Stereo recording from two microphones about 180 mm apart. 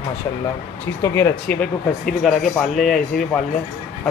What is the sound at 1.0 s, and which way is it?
Speech, 15° left (ahead or behind).